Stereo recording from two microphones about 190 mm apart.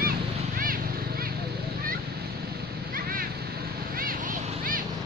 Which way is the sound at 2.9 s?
50° right (ahead or behind).